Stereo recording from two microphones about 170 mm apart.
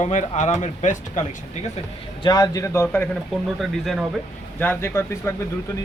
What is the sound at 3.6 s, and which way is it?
Speech, centre (ahead or behind).